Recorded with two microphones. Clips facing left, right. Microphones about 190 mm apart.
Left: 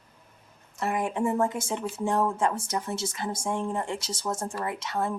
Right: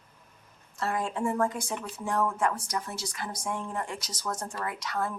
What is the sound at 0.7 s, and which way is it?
Speech, 20° left (ahead or behind).